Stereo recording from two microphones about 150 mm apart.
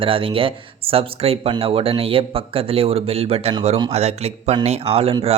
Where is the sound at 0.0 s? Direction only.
35° right (ahead or behind).